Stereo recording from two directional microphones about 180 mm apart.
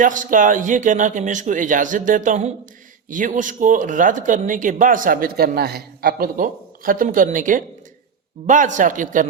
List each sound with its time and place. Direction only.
0.0 s speech: 45° right (ahead or behind)